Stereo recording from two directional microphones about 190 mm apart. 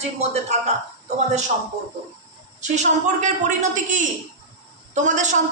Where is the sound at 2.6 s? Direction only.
40° right (ahead or behind).